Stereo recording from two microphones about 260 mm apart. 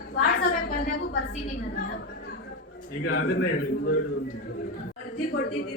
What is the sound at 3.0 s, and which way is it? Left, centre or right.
Speech, left.